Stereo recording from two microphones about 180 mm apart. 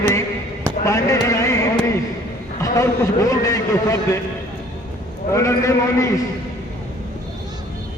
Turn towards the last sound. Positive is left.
turn(degrees=15)  # may be behind; listen again after turning